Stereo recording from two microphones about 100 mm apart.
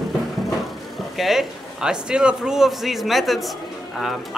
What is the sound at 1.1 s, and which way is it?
Speech, centre (ahead or behind).